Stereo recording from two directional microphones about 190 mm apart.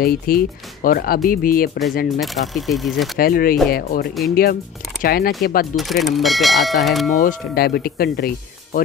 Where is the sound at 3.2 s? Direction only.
50° left (ahead or behind).